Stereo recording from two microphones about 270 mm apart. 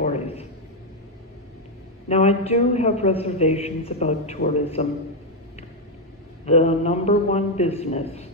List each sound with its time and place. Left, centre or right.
0.0 s a sound: left
2.0 s a man's voice: left
6.4 s a man's voice: left